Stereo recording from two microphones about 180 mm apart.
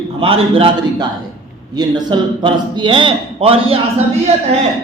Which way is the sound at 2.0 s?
25° right (ahead or behind).